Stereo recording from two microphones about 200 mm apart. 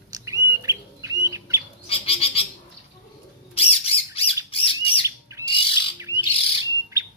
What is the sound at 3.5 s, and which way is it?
Squawk, 30° left (ahead or behind).